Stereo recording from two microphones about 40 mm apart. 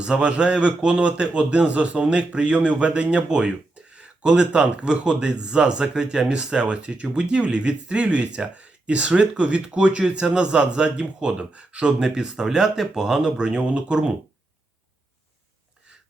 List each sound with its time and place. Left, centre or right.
0.0 s speech: right; by 13.2 s centre
13.2 s speech: right